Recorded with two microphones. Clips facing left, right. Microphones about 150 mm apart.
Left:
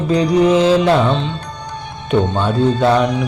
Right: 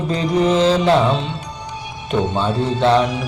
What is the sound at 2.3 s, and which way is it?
Music, centre (ahead or behind).